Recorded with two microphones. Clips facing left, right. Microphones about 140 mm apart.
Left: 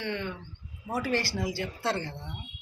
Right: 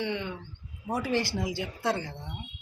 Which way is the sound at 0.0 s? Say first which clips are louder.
Right 1 dB; 15° right (ahead or behind).